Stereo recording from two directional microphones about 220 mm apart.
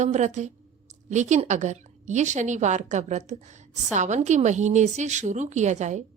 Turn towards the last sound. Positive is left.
turn(degrees=-30)  # may be behind; listen again after turning